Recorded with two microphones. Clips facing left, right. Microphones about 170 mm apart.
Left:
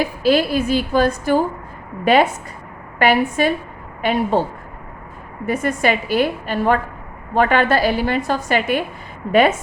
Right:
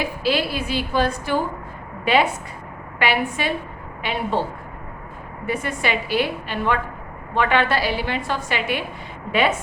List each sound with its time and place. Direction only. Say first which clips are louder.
0.0 s a woman's voice: left 6 dB; 45° left (ahead or behind)
5.5 s a woman's voice: left 6 dB; 45° left (ahead or behind)